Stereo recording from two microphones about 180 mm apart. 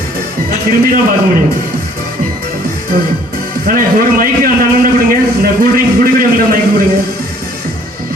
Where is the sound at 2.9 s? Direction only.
55° right (ahead or behind).